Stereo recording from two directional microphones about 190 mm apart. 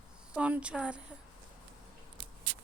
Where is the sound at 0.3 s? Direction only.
5° right (ahead or behind).